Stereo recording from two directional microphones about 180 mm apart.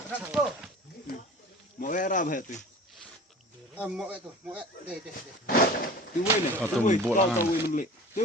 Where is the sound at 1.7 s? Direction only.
45° left (ahead or behind).